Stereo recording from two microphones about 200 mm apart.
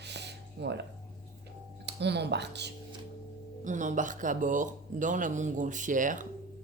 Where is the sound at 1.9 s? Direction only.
55° right (ahead or behind).